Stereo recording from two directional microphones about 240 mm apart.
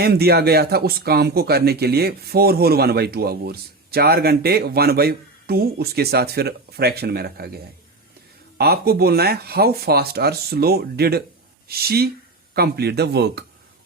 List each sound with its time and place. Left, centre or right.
0.0 s speech: right